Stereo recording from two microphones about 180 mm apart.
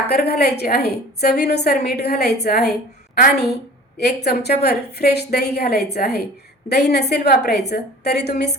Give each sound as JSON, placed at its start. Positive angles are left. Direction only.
{"t": 0.1, "sound": "a woman's voice", "side_deg": 60}
{"t": 3.2, "sound": "a woman's voice", "side_deg": 50}
{"t": 3.5, "sound": "a woman's voice", "side_deg": 65}